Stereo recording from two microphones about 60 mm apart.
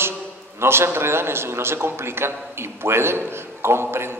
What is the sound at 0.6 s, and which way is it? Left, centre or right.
A man's voice, right.